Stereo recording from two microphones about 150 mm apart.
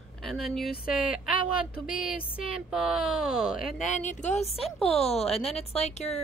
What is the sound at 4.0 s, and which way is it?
Speech, 50° left (ahead or behind).